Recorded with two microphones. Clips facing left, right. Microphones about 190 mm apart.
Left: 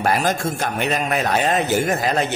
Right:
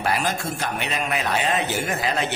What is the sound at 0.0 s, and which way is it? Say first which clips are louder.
A man's voice: left 5 dB; 45° left (ahead or behind).